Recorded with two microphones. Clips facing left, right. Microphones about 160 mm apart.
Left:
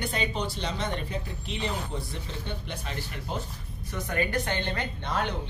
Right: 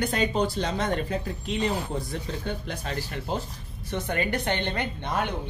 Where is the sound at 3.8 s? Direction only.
25° right (ahead or behind).